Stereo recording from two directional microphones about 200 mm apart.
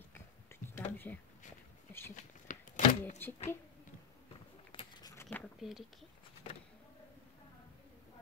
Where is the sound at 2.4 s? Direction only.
40° left (ahead or behind).